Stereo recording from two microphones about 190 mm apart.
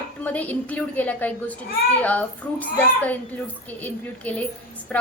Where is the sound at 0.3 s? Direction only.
10° left (ahead or behind).